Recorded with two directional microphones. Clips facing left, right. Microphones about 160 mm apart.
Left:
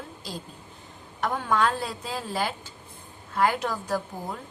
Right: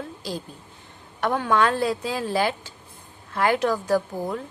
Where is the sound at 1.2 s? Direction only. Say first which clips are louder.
Right 4 dB; 80° right.